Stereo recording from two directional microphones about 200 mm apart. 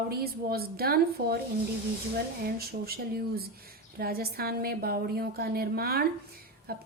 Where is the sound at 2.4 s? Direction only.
50° right (ahead or behind).